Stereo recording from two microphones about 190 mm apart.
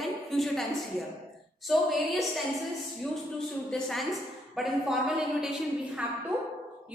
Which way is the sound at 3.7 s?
Centre (ahead or behind).